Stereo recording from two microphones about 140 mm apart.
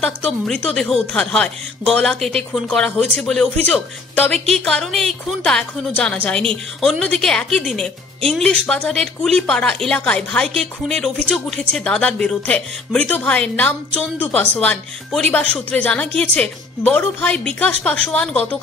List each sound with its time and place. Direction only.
0.0 s a woman's voice: 5° left (ahead or behind)